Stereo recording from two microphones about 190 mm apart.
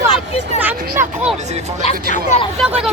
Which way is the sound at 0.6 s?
10° right (ahead or behind).